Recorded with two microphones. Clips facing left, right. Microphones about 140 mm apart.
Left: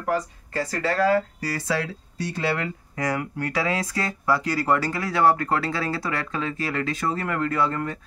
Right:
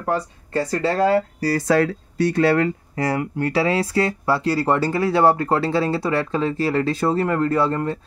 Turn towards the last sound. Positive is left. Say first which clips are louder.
# right 5 dB
turn(degrees=-30)  # may be behind; listen again after turning